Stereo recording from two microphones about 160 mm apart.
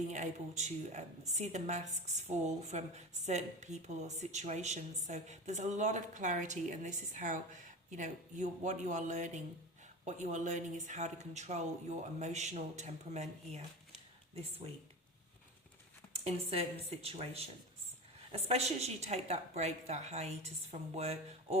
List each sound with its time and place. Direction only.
0.1 s a woman's voice: 50° right (ahead or behind)
16.1 s a woman's voice: 40° right (ahead or behind)